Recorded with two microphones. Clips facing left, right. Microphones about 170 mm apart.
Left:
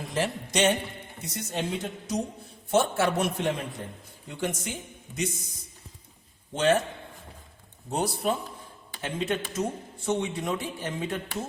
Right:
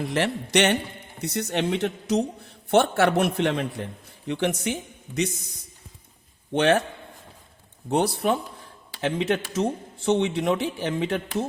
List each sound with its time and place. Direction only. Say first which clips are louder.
0.1 s a man's voice: right 3 dB; 75° right (ahead or behind)
6.5 s a man's voice: right 3 dB; 65° right (ahead or behind)
7.9 s a man's voice: right 5 dB; 70° right (ahead or behind)